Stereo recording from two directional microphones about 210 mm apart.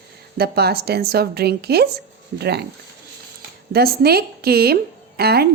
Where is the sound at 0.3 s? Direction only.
50° right (ahead or behind).